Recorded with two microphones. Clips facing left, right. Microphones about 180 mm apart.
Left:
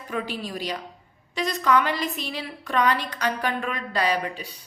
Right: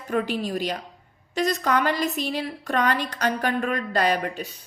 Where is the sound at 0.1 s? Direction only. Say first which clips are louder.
Right 5 dB; 45° right (ahead or behind).